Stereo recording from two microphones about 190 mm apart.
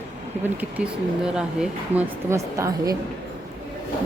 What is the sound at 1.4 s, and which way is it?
Speech, 5° right (ahead or behind).